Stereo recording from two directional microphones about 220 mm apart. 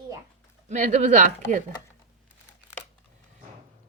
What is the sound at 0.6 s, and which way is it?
Speech, 35° right (ahead or behind).